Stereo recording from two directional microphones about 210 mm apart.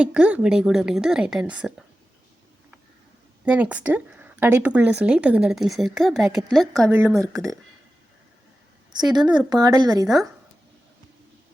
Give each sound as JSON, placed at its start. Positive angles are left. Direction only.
{"t": 0.0, "sound": "speech", "side_deg": -5}
{"t": 3.4, "sound": "speech", "side_deg": -5}
{"t": 6.9, "sound": "speech", "side_deg": -10}
{"t": 9.2, "sound": "speech", "side_deg": -5}
{"t": 9.5, "sound": "speech", "side_deg": -20}